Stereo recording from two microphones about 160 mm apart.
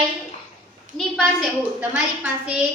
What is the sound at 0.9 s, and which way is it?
A woman's voice, centre (ahead or behind).